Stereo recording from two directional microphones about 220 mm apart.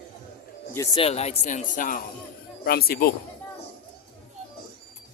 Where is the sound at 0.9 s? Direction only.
25° left (ahead or behind); by 3.1 s 45° left (ahead or behind).